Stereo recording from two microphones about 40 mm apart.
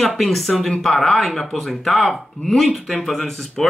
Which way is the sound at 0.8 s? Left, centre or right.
Centre.